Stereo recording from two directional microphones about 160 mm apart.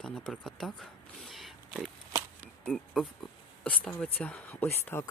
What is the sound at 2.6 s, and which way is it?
Speech, centre (ahead or behind).